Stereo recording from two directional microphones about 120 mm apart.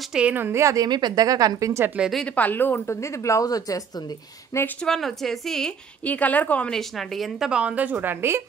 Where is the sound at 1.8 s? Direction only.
10° right (ahead or behind).